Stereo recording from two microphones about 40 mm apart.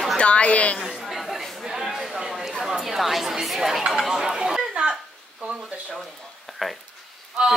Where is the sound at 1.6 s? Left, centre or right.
Centre.